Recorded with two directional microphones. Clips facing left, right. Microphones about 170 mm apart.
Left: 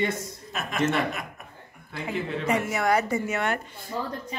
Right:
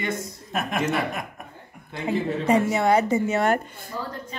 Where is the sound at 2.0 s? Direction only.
30° right (ahead or behind).